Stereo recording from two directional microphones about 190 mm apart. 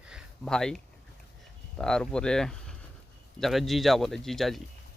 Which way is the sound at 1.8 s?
5° left (ahead or behind).